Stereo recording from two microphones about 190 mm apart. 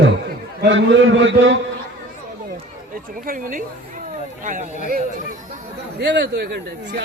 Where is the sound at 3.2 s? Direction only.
45° right (ahead or behind).